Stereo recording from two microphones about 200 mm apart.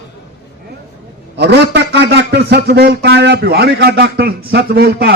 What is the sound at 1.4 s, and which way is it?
Speech, 60° right (ahead or behind).